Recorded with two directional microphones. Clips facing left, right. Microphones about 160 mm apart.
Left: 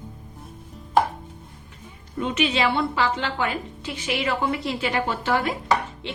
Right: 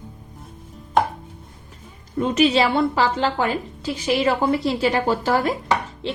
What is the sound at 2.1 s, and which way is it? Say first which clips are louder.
A woman's voice: right 6 dB; 40° right (ahead or behind).